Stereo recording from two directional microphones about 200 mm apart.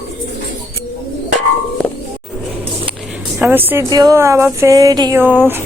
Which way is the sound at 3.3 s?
10° right (ahead or behind).